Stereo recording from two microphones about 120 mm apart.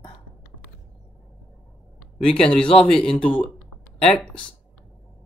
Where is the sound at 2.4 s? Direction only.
5° left (ahead or behind).